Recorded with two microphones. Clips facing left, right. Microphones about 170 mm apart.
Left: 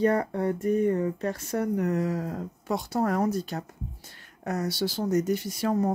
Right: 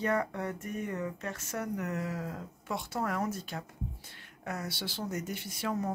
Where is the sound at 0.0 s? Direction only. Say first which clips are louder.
Left 7 dB; 35° left (ahead or behind).